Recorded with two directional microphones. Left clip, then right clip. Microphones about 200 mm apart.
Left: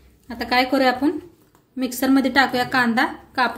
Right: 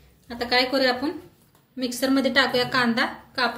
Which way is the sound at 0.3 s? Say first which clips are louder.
Left 2 dB; 50° left (ahead or behind).